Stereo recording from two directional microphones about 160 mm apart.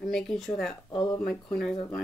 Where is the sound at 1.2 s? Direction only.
5° left (ahead or behind).